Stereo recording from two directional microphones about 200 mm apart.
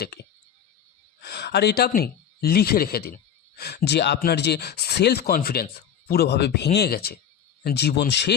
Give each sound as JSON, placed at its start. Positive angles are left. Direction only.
{"t": 1.2, "sound": "speech", "side_deg": 55}